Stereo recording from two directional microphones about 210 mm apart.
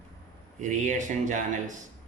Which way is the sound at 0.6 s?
35° right (ahead or behind).